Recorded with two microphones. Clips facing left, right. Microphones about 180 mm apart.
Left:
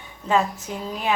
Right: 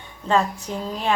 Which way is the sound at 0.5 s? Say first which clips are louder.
Right 2 dB; 5° left (ahead or behind).